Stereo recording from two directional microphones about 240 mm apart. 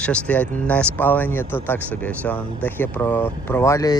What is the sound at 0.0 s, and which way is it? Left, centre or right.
Speech, centre.